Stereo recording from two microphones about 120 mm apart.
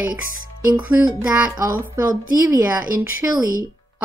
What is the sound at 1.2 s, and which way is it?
Speech, 10° right (ahead or behind).